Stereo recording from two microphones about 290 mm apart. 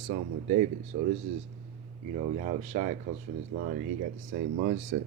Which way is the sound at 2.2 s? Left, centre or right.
Right.